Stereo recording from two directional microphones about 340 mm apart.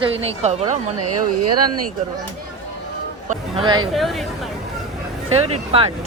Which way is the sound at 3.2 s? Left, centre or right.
Centre.